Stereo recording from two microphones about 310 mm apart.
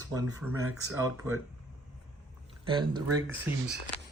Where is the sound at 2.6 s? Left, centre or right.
Centre.